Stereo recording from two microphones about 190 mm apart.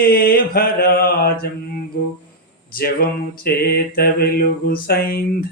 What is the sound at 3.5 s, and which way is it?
Mantra, 55° left (ahead or behind).